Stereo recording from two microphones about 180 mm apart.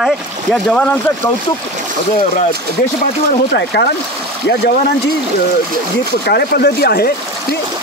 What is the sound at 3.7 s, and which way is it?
Speech, 65° left (ahead or behind).